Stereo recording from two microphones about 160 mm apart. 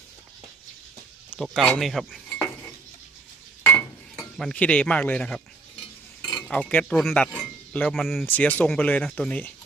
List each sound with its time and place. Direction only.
1.3 s speech: 5° left (ahead or behind)
3.7 s a sound: 15° left (ahead or behind)
4.4 s speech: 5° left (ahead or behind)
6.2 s cutlery: 5° left (ahead or behind)
7.3 s speech: 5° left (ahead or behind)
8.3 s speech: 10° left (ahead or behind)